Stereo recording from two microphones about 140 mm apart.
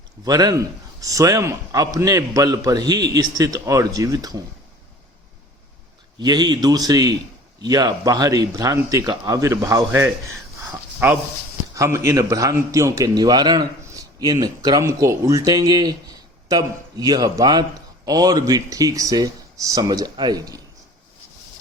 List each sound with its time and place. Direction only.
0.3 s a man's voice: 25° right (ahead or behind)
6.1 s a man's voice: 30° right (ahead or behind)
10.7 s a sound: 15° right (ahead or behind)
11.7 s a man's voice: 20° right (ahead or behind)